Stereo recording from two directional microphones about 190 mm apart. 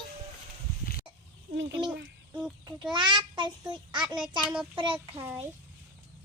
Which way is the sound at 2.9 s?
25° right (ahead or behind).